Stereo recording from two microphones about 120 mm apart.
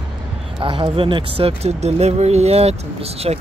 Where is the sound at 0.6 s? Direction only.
45° right (ahead or behind).